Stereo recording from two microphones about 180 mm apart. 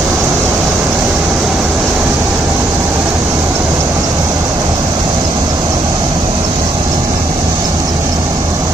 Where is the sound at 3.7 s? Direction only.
20° right (ahead or behind).